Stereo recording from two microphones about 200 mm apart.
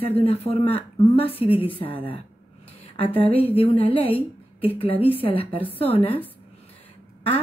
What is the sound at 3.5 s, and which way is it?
A woman's voice, 25° left (ahead or behind).